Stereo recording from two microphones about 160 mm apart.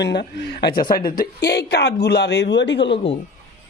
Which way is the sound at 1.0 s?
65° left (ahead or behind).